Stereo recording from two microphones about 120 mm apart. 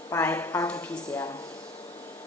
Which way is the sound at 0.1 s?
20° left (ahead or behind).